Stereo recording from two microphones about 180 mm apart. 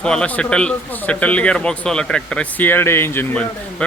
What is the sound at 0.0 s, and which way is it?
A man's voice, 5° left (ahead or behind).